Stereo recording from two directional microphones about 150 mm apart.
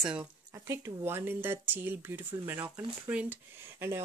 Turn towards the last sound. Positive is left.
turn(degrees=-15)  # may be behind; listen again after turning